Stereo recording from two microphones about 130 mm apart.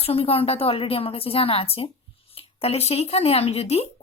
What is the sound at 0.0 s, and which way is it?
A woman's voice, 50° left (ahead or behind).